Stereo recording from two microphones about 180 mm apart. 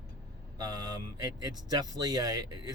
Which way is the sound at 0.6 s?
20° right (ahead or behind).